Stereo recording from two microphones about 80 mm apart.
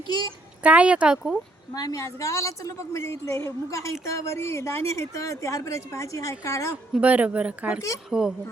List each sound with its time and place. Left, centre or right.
0.6 s speech: centre
1.7 s speech: left
7.0 s speech: centre